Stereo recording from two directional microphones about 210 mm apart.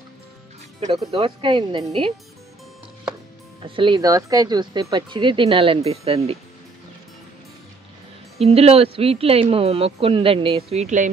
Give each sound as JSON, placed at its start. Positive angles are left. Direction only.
{"t": 1.1, "sound": "speech", "side_deg": -25}
{"t": 3.6, "sound": "speech", "side_deg": -25}
{"t": 8.4, "sound": "speech", "side_deg": -30}